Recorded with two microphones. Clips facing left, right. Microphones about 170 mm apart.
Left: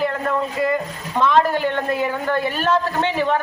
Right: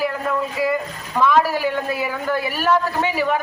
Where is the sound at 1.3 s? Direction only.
5° right (ahead or behind).